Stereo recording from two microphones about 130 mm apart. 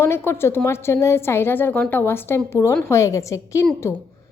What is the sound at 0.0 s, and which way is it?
A woman's voice, 20° left (ahead or behind).